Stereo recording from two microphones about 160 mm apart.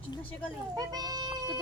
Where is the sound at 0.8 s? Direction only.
25° right (ahead or behind).